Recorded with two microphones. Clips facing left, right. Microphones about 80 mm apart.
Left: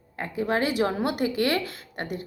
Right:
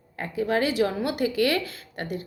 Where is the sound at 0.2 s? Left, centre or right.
Left.